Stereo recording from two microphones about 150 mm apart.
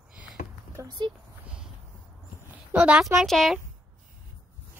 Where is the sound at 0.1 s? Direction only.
5° right (ahead or behind).